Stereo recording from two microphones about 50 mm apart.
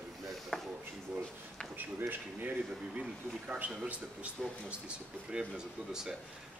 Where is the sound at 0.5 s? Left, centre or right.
Centre.